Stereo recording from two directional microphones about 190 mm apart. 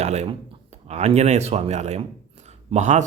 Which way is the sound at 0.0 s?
35° right (ahead or behind).